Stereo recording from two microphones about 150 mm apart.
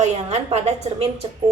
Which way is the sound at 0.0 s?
50° right (ahead or behind).